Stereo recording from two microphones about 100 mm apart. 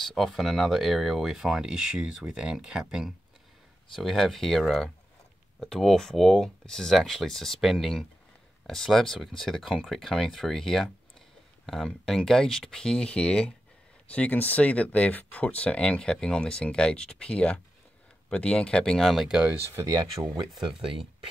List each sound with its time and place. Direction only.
0.0 s speech: centre (ahead or behind)
20.2 s speech: 50° right (ahead or behind)